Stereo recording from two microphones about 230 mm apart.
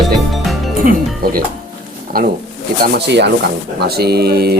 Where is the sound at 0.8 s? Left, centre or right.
Right.